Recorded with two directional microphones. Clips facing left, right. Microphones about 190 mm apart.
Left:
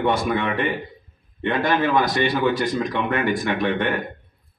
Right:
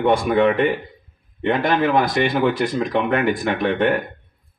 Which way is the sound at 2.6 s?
60° right (ahead or behind).